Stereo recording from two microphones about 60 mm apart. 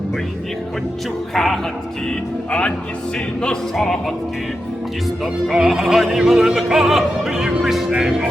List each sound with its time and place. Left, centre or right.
1.3 s speech: centre
2.5 s speech: centre
5.2 s speech: centre